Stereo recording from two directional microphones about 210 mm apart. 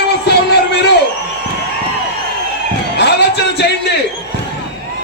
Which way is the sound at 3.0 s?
55° left (ahead or behind).